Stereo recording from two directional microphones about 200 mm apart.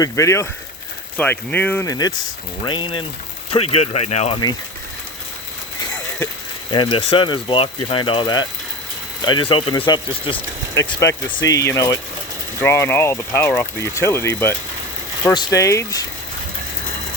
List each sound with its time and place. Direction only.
0.0 s speech: 15° left (ahead or behind); by 4.4 s 30° left (ahead or behind)
6.7 s speech: 25° left (ahead or behind)
11.4 s speech: 15° left (ahead or behind)